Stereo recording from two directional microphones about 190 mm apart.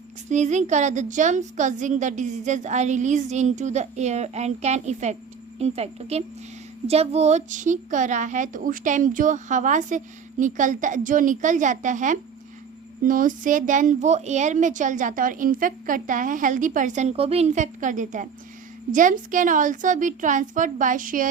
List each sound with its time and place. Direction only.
0.3 s a woman's voice: 40° right (ahead or behind)